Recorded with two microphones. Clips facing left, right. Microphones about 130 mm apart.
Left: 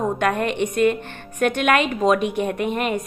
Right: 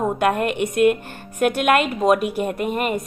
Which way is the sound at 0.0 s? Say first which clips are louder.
Right 1 dB; 10° right (ahead or behind).